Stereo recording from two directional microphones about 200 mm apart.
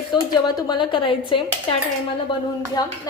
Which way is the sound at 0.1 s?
20° left (ahead or behind).